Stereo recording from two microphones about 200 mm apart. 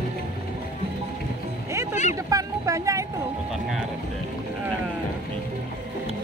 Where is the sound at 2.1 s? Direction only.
15° right (ahead or behind).